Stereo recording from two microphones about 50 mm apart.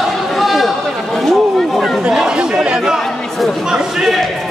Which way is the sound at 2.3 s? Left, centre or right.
Centre.